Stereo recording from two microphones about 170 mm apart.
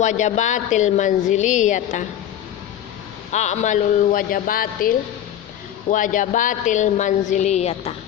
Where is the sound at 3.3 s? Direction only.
45° left (ahead or behind).